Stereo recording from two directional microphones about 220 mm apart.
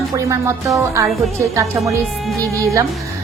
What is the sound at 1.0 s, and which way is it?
Speech, centre (ahead or behind).